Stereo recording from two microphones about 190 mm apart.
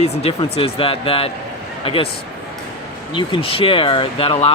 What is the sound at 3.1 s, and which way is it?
Speech, 25° left (ahead or behind).